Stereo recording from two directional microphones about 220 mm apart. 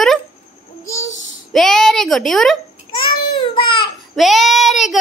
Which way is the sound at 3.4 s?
25° left (ahead or behind).